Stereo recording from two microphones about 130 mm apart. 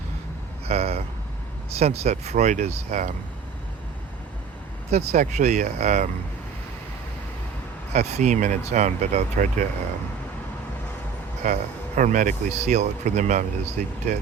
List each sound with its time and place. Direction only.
0.7 s speech: 50° right (ahead or behind); by 3.2 s 70° right (ahead or behind)
4.9 s speech: 55° right (ahead or behind)
7.9 s speech: 60° right (ahead or behind); by 9.6 s 75° right (ahead or behind)
11.4 s speech: 75° right (ahead or behind)